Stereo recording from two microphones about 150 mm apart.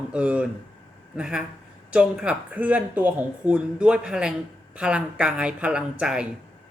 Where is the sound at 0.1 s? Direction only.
10° right (ahead or behind).